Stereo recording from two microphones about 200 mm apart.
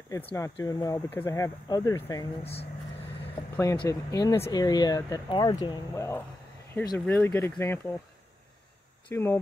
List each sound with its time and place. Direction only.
0.3 s speech: 15° left (ahead or behind)
3.4 s vehicle: 15° left (ahead or behind)
3.7 s speech: 20° left (ahead or behind)
9.1 s speech: 10° left (ahead or behind)